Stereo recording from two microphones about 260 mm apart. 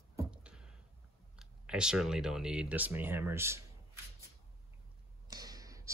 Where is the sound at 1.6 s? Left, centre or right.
Centre.